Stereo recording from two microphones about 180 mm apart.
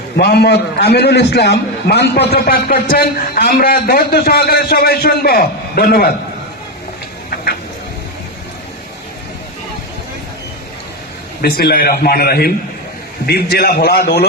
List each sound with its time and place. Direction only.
0.2 s a man's voice: 65° left (ahead or behind)
11.4 s a man's voice: 60° left (ahead or behind)